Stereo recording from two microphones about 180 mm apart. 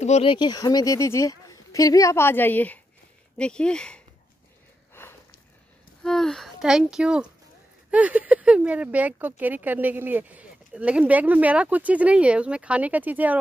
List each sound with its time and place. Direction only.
0.0 s speech: 35° left (ahead or behind); by 4.0 s 5° left (ahead or behind)
5.0 s sniff: 10° left (ahead or behind)
6.0 s speech: centre (ahead or behind)